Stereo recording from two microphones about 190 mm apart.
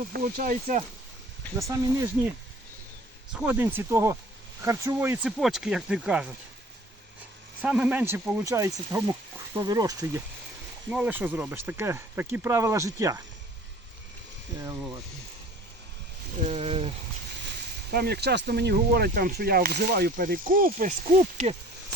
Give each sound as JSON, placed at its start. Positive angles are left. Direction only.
{"t": 0.1, "sound": "speech", "side_deg": -50}
{"t": 1.5, "sound": "speech", "side_deg": -15}
{"t": 3.3, "sound": "speech", "side_deg": -10}
{"t": 7.6, "sound": "speech", "side_deg": -5}
{"t": 16.5, "sound": "speech", "side_deg": -30}
{"t": 17.9, "sound": "speech", "side_deg": -55}